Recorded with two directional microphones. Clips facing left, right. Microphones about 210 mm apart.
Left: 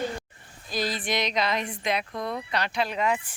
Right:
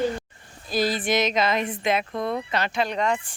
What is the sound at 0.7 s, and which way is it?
A woman's voice, 5° right (ahead or behind).